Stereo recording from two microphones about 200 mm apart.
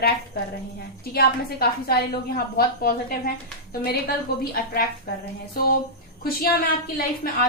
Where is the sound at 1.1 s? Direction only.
50° left (ahead or behind).